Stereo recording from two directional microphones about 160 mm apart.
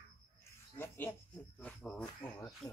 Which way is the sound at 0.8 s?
10° left (ahead or behind).